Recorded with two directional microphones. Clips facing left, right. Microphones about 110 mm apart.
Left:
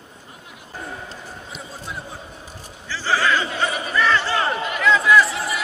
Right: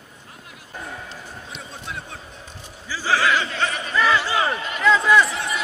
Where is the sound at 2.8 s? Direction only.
10° right (ahead or behind).